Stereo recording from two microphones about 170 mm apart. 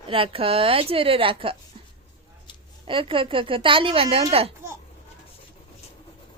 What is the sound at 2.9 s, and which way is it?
A woman's voice, 30° right (ahead or behind).